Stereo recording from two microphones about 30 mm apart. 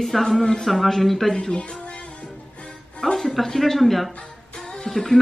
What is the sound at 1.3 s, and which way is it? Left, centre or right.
Speech, left.